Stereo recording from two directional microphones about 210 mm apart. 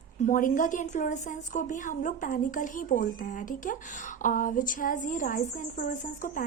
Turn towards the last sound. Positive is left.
turn(degrees=40)  # may be behind; listen again after turning